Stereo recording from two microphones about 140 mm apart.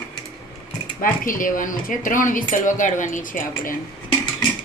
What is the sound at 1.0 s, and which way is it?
Speech, 75° left (ahead or behind).